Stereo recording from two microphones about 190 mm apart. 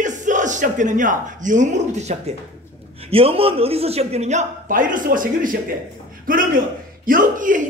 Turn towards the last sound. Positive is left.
turn(degrees=-45)  # may be behind; listen again after turning